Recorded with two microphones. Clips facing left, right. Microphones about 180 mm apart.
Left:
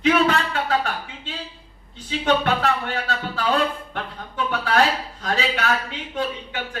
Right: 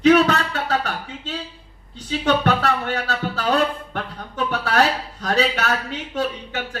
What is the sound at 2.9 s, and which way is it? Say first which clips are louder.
Speech: right 2 dB; 40° right (ahead or behind).